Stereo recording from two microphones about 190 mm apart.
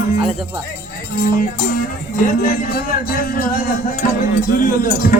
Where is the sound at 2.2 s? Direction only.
45° left (ahead or behind).